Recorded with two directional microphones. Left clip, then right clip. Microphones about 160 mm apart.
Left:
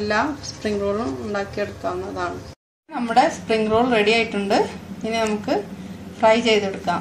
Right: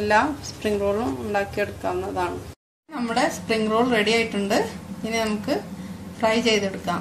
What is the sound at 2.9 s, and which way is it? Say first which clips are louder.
A woman's voice: left 6 dB; 20° right (ahead or behind).